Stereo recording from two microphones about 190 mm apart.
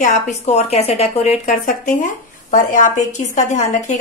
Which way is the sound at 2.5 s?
40° left (ahead or behind).